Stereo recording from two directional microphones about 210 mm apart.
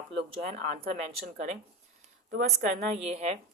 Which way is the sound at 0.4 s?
45° right (ahead or behind).